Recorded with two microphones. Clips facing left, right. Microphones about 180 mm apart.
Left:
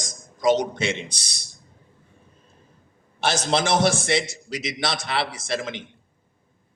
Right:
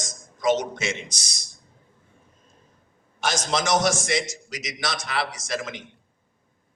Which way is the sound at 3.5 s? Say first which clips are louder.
Left 2 dB; 30° left (ahead or behind).